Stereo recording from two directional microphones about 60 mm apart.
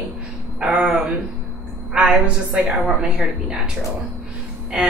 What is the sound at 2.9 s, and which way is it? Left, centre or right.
Speech, centre.